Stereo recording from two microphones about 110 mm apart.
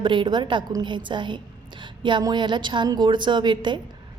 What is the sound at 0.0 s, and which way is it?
A woman's voice, 45° right (ahead or behind).